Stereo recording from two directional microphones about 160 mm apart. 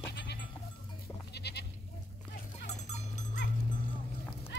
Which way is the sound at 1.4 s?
90° left.